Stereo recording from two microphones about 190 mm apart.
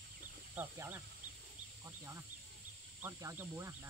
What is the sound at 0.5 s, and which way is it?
Speech, 10° right (ahead or behind).